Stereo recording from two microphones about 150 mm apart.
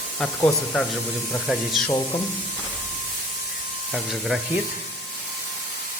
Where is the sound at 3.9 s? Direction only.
Centre (ahead or behind).